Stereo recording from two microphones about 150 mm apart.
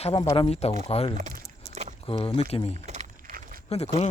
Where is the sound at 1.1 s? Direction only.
65° right (ahead or behind).